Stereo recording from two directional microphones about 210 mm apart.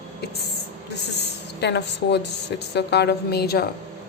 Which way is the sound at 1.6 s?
55° left (ahead or behind).